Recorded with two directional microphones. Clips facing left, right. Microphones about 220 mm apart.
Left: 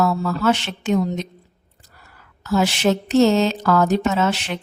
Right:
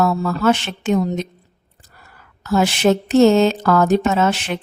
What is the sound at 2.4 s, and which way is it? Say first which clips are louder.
Speech: right 3 dB; 50° right (ahead or behind).